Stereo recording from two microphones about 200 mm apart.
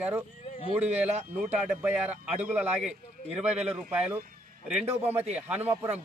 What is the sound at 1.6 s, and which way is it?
A man's voice, 5° right (ahead or behind).